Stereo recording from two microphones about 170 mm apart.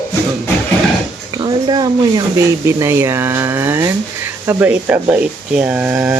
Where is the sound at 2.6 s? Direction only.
15° right (ahead or behind).